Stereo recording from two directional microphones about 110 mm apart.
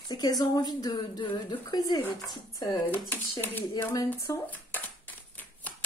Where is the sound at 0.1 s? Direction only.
35° left (ahead or behind).